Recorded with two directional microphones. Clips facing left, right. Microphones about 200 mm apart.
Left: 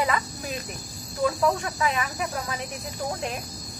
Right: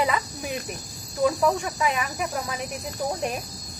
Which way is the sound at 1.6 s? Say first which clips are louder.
Right 1 dB; 5° right (ahead or behind).